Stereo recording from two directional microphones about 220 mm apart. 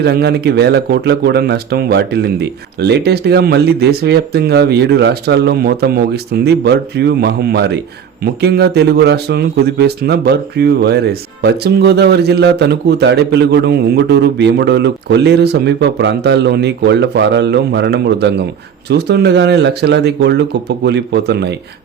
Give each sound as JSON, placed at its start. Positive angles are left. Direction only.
{"t": 0.0, "sound": "speech", "side_deg": -45}